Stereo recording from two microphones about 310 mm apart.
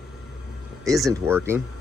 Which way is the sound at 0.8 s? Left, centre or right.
Centre.